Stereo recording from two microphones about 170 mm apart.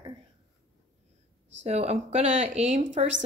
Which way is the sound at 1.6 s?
40° right (ahead or behind).